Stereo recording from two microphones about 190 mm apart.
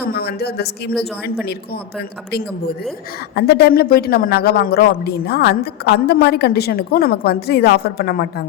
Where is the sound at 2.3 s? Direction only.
60° left (ahead or behind).